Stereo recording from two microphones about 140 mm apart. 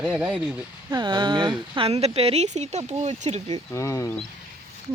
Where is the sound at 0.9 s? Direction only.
35° right (ahead or behind); by 3.6 s 50° right (ahead or behind).